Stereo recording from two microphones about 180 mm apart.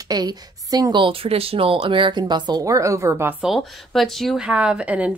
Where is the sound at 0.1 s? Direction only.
20° right (ahead or behind).